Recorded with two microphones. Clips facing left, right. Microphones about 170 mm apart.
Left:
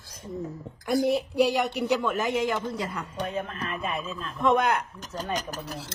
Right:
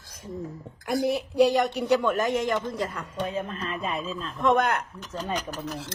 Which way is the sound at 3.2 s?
25° right (ahead or behind).